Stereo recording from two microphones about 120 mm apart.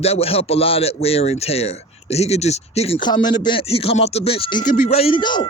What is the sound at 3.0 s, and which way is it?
Speech, 35° left (ahead or behind).